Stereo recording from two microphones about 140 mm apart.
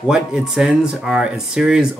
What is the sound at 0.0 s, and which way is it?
Speech, 5° right (ahead or behind).